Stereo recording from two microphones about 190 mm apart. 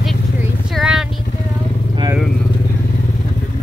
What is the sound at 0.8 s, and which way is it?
Vehicle, 5° right (ahead or behind).